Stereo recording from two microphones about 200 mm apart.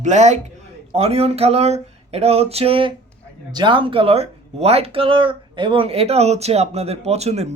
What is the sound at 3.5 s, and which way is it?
Speech, 20° right (ahead or behind).